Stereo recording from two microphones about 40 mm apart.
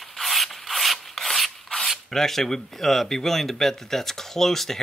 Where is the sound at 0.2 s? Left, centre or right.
Centre.